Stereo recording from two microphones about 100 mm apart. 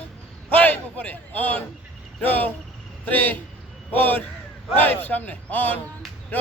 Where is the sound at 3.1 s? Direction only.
20° left (ahead or behind).